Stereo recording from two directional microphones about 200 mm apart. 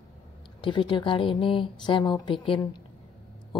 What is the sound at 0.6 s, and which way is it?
Speech, 25° left (ahead or behind).